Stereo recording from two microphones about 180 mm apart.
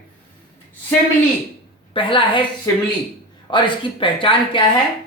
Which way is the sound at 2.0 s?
30° left (ahead or behind).